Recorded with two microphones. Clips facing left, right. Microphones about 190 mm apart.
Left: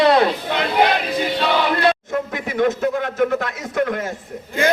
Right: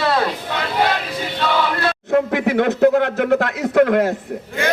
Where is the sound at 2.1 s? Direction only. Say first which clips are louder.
Right 7 dB; 65° right (ahead or behind).